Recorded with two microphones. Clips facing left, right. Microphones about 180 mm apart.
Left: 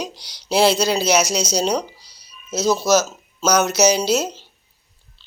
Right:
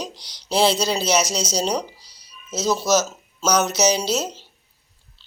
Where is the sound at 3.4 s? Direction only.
5° left (ahead or behind).